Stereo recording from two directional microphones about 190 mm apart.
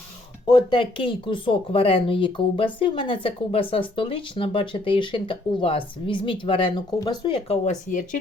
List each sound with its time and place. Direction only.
0.4 s speech: 25° left (ahead or behind); by 8.2 s 40° left (ahead or behind)